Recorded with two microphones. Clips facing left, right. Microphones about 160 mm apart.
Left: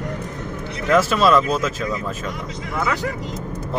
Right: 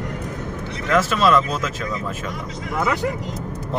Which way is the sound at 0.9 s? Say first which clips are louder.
Left 2 dB; 5° left (ahead or behind).